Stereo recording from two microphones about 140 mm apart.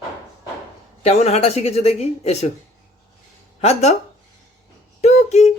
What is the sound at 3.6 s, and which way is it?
Speech, 50° left (ahead or behind).